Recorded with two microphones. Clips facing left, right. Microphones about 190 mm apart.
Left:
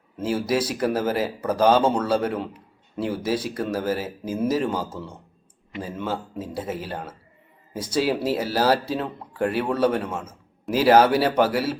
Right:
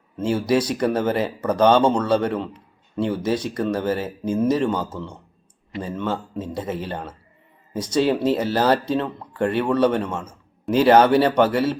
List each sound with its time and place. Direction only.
0.2 s speech: 5° left (ahead or behind)